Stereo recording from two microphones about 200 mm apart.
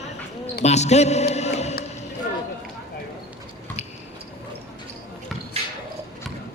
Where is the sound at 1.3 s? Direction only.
35° left (ahead or behind).